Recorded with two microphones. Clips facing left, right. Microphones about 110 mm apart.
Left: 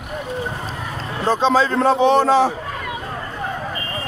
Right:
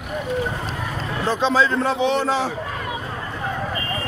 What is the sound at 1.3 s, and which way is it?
A man's voice, 40° left (ahead or behind).